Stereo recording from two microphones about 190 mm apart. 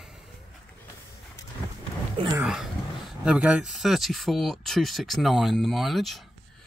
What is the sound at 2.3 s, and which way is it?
Speech, 5° right (ahead or behind).